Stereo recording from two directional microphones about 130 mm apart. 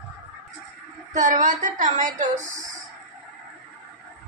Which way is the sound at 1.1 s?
75° right (ahead or behind).